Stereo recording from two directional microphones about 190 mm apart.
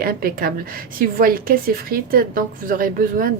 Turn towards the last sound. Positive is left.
turn(degrees=-45)  # may be behind; listen again after turning